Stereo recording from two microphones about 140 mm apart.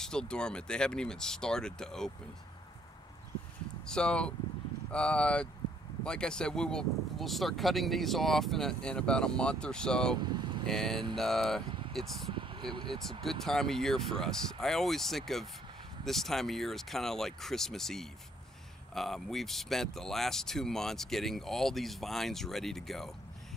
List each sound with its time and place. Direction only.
0.0 s speech: 5° left (ahead or behind)
3.8 s speech: 5° left (ahead or behind)
10.1 s speech: 30° right (ahead or behind)
10.7 s speech: 5° left (ahead or behind)
12.3 s vehicle: 35° right (ahead or behind)
12.7 s speech: 35° right (ahead or behind)
13.2 s speech: centre (ahead or behind)